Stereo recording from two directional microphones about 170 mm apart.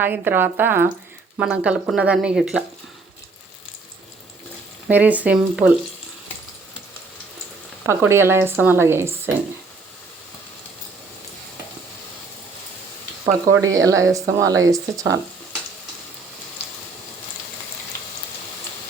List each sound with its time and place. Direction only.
0.0 s speech: 10° right (ahead or behind)
4.9 s speech: 10° right (ahead or behind)
7.9 s speech: 15° right (ahead or behind)
13.6 s speech: 20° right (ahead or behind)